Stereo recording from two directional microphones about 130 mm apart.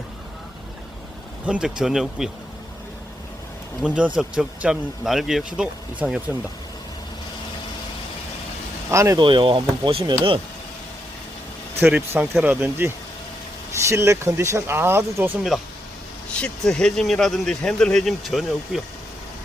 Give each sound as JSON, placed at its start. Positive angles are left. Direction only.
{"t": 1.5, "sound": "speech", "side_deg": -10}
{"t": 3.8, "sound": "speech", "side_deg": -10}
{"t": 8.9, "sound": "speech", "side_deg": -25}
{"t": 9.1, "sound": "speech", "side_deg": -40}
{"t": 11.8, "sound": "speech", "side_deg": -15}
{"t": 15.5, "sound": "speech", "side_deg": 0}